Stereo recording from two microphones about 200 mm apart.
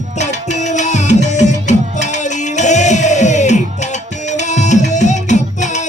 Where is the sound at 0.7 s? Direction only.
35° left (ahead or behind).